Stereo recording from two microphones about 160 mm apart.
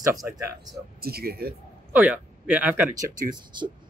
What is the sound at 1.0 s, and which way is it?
Speech, 75° right (ahead or behind).